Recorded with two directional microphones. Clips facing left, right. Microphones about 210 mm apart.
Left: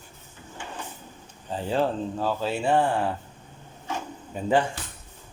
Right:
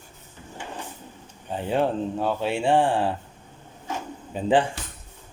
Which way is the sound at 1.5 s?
20° right (ahead or behind).